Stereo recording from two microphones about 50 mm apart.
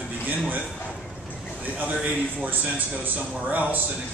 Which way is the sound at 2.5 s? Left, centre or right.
Right.